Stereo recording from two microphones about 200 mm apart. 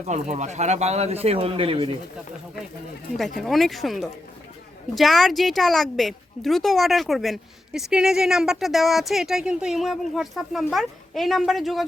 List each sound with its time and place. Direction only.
0.1 s speech: 35° right (ahead or behind)
3.4 s a woman's voice: centre (ahead or behind)